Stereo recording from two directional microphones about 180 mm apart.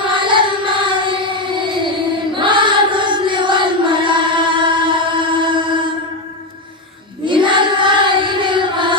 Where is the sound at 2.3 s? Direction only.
25° right (ahead or behind).